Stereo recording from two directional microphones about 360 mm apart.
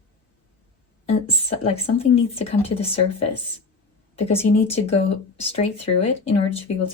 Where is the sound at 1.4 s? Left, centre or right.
Centre.